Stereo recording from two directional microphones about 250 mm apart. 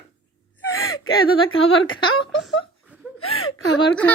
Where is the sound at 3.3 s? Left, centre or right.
Left.